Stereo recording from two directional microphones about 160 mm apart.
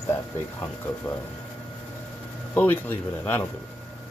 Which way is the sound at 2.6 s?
10° left (ahead or behind).